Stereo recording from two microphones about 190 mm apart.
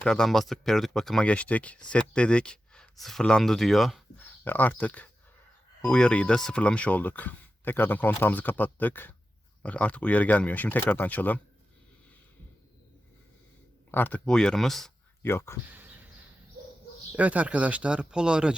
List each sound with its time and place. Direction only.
0.0 s speech: 5° left (ahead or behind)
13.9 s speech: 10° left (ahead or behind)
15.6 s speech: 10° right (ahead or behind)
17.2 s speech: 10° right (ahead or behind)